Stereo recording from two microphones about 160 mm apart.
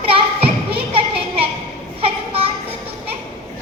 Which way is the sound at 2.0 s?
35° right (ahead or behind).